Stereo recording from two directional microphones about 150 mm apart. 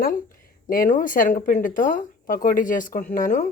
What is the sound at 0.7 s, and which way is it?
Speech, 65° left (ahead or behind).